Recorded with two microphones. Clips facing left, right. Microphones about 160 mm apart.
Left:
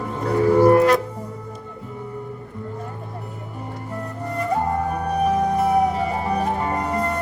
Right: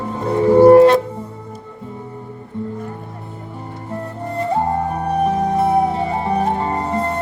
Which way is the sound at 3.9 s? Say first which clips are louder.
Right 4 dB; 30° right (ahead or behind).